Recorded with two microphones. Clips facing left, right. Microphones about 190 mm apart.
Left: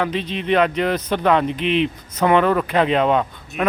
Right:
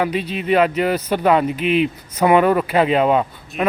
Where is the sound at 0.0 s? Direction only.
10° right (ahead or behind).